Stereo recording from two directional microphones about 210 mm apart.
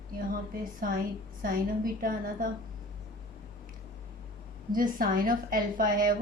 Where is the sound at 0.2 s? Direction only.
40° right (ahead or behind).